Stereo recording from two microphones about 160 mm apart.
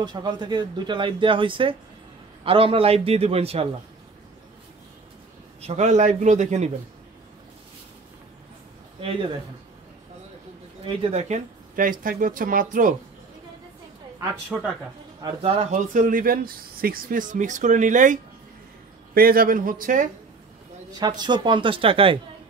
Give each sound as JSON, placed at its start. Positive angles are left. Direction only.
{"t": 0.0, "sound": "a man's voice", "side_deg": -25}
{"t": 5.6, "sound": "speech", "side_deg": -45}
{"t": 10.9, "sound": "speech", "side_deg": -35}
{"t": 14.5, "sound": "speech", "side_deg": -5}
{"t": 15.2, "sound": "speech", "side_deg": -35}
{"t": 19.1, "sound": "speech", "side_deg": -65}
{"t": 21.0, "sound": "a man's voice", "side_deg": -25}